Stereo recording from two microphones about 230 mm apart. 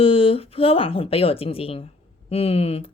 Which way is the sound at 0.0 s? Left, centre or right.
Left.